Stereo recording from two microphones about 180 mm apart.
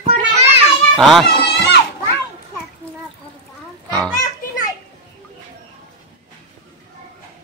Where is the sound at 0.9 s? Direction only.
Centre (ahead or behind).